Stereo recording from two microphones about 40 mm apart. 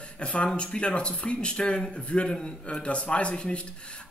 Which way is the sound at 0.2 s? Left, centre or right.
Left.